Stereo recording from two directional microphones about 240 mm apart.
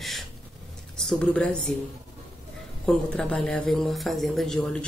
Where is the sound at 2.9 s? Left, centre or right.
Centre.